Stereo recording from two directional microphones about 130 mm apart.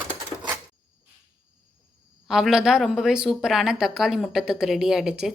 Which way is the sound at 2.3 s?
5° right (ahead or behind).